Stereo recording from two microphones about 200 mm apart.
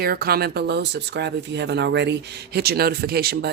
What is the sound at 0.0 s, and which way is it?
Speech, 50° right (ahead or behind).